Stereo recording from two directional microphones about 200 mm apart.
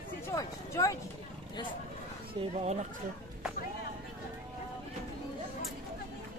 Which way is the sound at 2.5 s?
35° right (ahead or behind).